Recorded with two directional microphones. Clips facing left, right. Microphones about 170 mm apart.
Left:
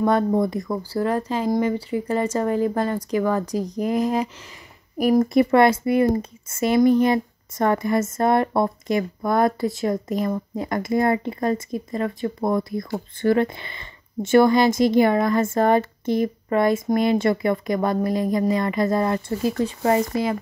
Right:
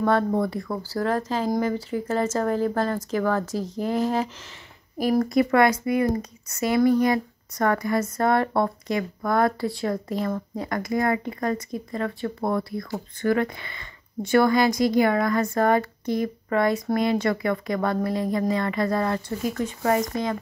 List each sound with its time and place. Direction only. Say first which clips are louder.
0.0 s speech: left 2 dB; 15° left (ahead or behind)
0.9 s speech: left 1 dB; 10° left (ahead or behind); by 20.1 s 25° left (ahead or behind)